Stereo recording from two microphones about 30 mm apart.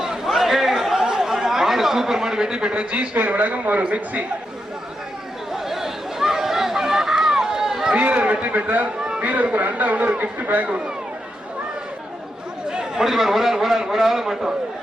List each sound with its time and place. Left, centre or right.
0.0 s chatter: centre
1.0 s a sound: centre; by 3.1 s right
3.2 s speech: right
3.8 s a man's voice: right
5.5 s chatter: centre
7.9 s a man's voice: right
9.0 s a sound: right
9.2 s speech: right
13.0 s a man's voice: centre